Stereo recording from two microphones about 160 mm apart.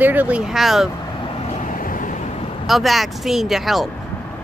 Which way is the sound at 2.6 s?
Centre (ahead or behind).